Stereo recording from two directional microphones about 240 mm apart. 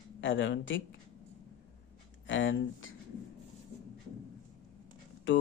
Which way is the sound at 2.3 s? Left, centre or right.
Left.